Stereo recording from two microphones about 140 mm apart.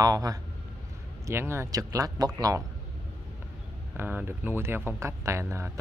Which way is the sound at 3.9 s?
15° right (ahead or behind).